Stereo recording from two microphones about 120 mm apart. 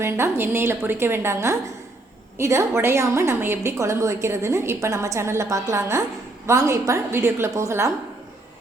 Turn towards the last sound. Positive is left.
turn(degrees=-25)  # may be behind; listen again after turning